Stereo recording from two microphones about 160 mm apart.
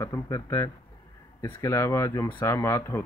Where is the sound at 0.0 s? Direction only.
20° left (ahead or behind).